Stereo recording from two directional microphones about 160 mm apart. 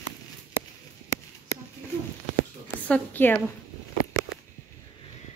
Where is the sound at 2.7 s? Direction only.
10° left (ahead or behind).